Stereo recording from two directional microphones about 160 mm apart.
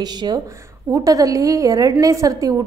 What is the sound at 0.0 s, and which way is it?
A woman's voice, 25° right (ahead or behind).